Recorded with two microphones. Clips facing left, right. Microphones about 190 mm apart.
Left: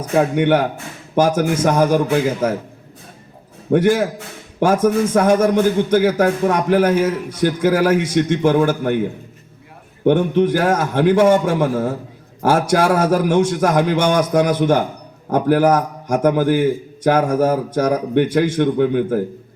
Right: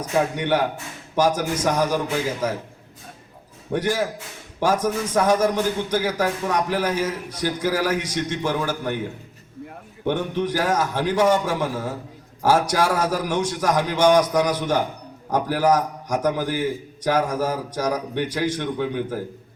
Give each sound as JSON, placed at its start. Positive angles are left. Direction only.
{"t": 0.1, "sound": "a man's voice", "side_deg": 55}
{"t": 3.7, "sound": "a man's voice", "side_deg": 55}
{"t": 10.0, "sound": "a man's voice", "side_deg": 55}